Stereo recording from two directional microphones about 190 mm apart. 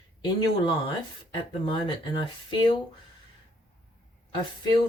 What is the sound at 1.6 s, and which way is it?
Speech, 25° left (ahead or behind).